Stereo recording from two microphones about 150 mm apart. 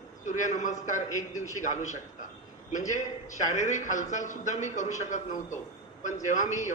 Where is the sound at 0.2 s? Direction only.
55° left (ahead or behind).